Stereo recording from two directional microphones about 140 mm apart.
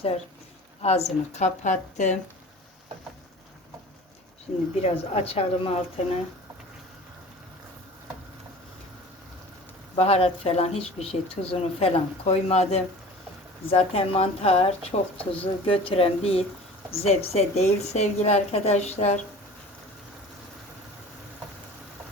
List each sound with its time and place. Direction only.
0.8 s a woman's voice: 50° left (ahead or behind)
4.8 s speech: 45° left (ahead or behind)
9.9 s speech: 45° left (ahead or behind)